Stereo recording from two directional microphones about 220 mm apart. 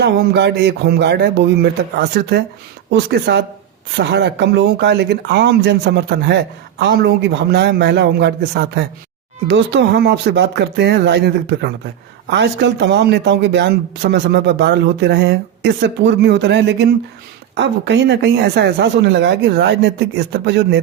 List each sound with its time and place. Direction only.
0.0 s speech: 50° right (ahead or behind)